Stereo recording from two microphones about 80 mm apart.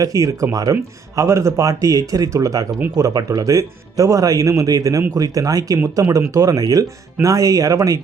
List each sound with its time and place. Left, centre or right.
0.0 s speech: right